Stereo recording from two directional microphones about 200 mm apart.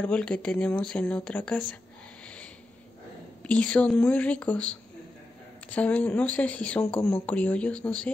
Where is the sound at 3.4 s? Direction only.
5° left (ahead or behind).